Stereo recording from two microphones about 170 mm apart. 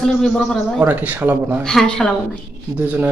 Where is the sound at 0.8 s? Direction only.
10° right (ahead or behind).